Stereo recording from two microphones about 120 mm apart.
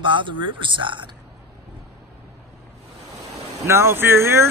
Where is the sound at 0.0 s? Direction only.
40° right (ahead or behind).